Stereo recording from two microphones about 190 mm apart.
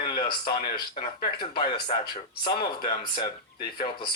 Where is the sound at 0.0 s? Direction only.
25° left (ahead or behind).